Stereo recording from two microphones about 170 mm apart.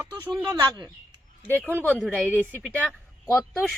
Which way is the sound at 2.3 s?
10° right (ahead or behind).